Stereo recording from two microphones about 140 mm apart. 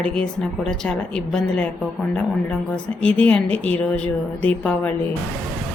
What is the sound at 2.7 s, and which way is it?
Speech, 10° left (ahead or behind).